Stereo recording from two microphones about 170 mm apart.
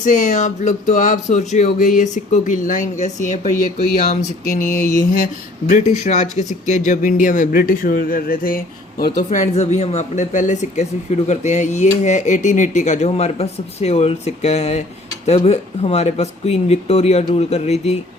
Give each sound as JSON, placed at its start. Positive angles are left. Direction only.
{"t": 0.0, "sound": "speech", "side_deg": 50}